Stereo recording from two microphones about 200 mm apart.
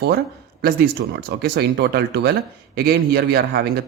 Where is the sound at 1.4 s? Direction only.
55° right (ahead or behind).